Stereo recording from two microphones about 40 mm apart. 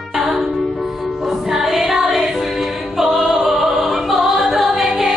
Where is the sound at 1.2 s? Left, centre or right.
Centre.